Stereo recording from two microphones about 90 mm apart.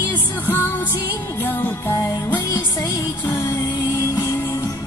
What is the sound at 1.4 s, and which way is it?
Music, 25° left (ahead or behind).